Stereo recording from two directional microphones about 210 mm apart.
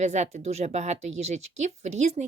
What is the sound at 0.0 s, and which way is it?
A woman's voice, 30° right (ahead or behind).